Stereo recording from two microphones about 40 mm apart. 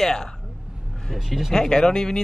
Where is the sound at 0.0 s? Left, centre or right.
Centre.